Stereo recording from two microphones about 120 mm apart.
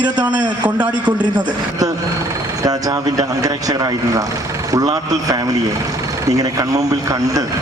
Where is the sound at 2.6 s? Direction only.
30° right (ahead or behind).